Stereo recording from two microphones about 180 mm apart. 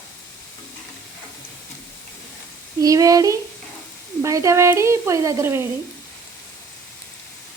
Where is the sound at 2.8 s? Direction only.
20° right (ahead or behind).